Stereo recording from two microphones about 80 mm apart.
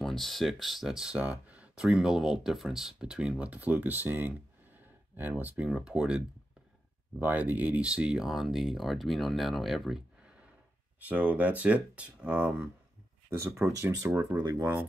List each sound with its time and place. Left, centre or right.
0.0 s speech: centre
7.2 s speech: right; by 10.3 s centre
11.1 s speech: centre
13.3 s speech: right